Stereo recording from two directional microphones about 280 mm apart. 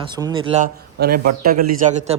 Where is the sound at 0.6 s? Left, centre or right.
Right.